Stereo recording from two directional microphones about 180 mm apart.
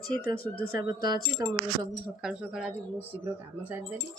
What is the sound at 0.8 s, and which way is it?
Speech, 25° right (ahead or behind).